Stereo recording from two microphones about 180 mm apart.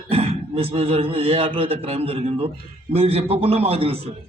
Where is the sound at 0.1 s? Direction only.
30° right (ahead or behind).